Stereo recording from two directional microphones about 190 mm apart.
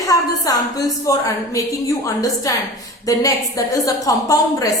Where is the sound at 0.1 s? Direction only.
20° left (ahead or behind).